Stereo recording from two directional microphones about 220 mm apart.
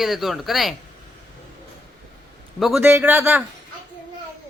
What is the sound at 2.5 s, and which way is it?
Speech, centre (ahead or behind).